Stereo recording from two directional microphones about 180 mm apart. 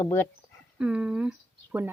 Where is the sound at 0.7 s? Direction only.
5° right (ahead or behind).